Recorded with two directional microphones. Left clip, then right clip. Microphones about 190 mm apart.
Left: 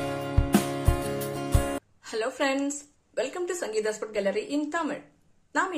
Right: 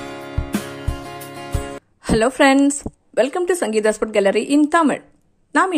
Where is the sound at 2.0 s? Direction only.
50° right (ahead or behind).